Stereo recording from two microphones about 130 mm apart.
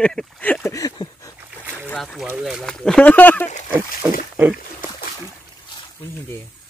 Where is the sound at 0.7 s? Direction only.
25° left (ahead or behind).